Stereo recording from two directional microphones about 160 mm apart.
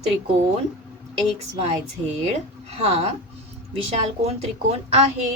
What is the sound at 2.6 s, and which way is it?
Speech, 40° right (ahead or behind).